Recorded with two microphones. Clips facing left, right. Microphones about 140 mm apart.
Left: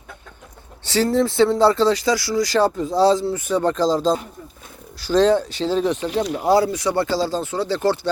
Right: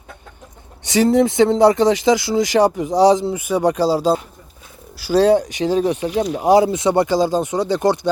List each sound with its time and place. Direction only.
0.9 s speech: 15° right (ahead or behind)